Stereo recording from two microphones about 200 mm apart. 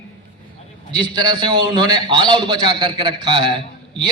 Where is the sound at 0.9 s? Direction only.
20° right (ahead or behind).